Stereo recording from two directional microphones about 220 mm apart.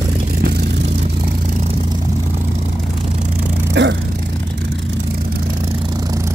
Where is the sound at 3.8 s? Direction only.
50° right (ahead or behind).